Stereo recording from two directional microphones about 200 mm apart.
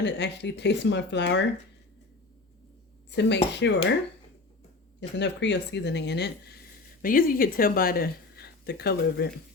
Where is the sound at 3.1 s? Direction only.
60° left (ahead or behind).